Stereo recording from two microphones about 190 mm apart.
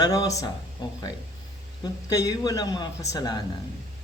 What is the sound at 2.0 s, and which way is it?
Speech, 20° left (ahead or behind).